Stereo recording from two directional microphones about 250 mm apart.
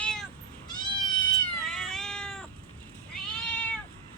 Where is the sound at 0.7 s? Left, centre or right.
Centre.